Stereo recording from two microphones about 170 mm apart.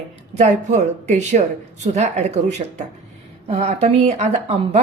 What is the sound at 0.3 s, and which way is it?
Speech, 40° right (ahead or behind).